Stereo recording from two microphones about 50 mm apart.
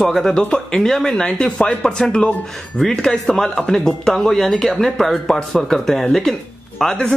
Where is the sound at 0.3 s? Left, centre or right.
Centre.